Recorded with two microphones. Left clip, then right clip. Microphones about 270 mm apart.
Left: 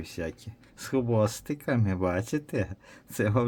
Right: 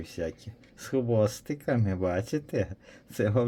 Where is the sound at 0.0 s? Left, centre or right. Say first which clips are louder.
Right 1 dB; centre.